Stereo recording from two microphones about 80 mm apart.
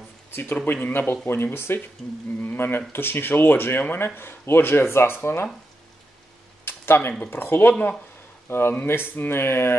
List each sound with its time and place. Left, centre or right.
0.3 s a man's voice: left
6.6 s a sound: left
7.2 s a man's voice: left